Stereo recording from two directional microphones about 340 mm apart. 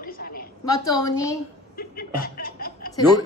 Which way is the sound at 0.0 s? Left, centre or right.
Left.